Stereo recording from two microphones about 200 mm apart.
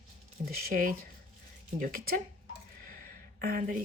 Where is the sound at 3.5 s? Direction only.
45° right (ahead or behind).